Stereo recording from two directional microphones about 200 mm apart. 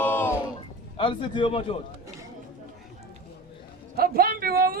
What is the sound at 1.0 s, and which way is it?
Speech, 25° left (ahead or behind).